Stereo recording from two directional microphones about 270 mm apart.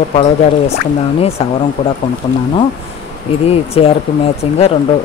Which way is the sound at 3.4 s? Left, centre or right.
Left.